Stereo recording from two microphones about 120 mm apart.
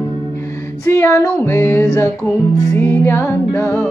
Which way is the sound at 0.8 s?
25° left (ahead or behind).